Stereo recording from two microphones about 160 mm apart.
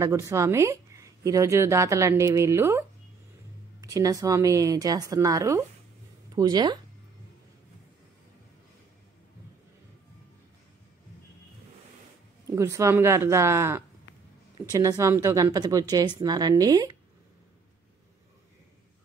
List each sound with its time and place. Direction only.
0.0 s speech: 20° right (ahead or behind)
3.8 s speech: 20° right (ahead or behind)
12.4 s speech: 20° right (ahead or behind)